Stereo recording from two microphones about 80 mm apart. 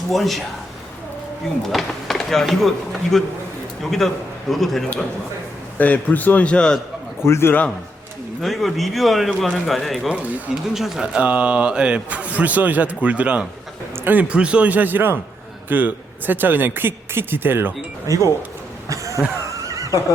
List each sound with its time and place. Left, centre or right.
0.1 s speech: centre
1.7 s speech: centre
5.7 s a man's voice: centre
7.3 s a man's voice: left
8.4 s speech: centre
10.1 s speech: centre
10.8 s a man's voice: centre; by 17.7 s right
18.1 s speech: right
19.5 s neigh: right